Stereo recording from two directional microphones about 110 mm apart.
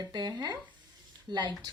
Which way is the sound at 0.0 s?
40° right (ahead or behind).